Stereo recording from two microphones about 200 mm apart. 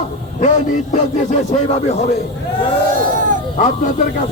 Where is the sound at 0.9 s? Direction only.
35° left (ahead or behind).